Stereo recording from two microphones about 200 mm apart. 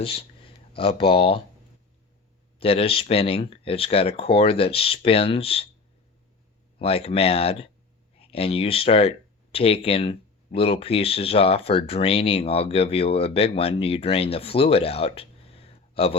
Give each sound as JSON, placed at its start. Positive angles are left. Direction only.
{"t": 0.0, "sound": "speech", "side_deg": 25}
{"t": 2.6, "sound": "speech", "side_deg": 30}
{"t": 6.7, "sound": "speech", "side_deg": 30}